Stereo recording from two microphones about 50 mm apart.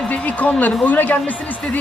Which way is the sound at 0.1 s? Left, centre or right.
Left.